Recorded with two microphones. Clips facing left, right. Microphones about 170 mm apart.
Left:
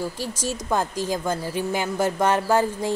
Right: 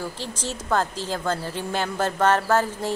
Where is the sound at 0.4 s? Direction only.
10° left (ahead or behind).